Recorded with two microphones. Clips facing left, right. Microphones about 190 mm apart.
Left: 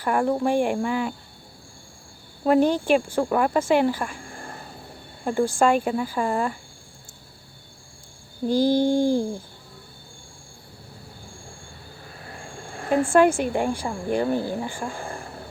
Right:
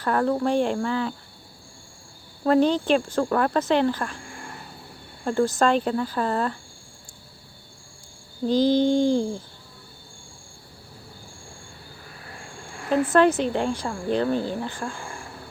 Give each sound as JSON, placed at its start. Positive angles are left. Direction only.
{"t": 0.0, "sound": "speech", "side_deg": 10}
{"t": 2.4, "sound": "speech", "side_deg": 10}
{"t": 4.3, "sound": "a sound", "side_deg": 35}
{"t": 5.2, "sound": "speech", "side_deg": 15}
{"t": 8.4, "sound": "speech", "side_deg": 10}
{"t": 13.1, "sound": "speech", "side_deg": 10}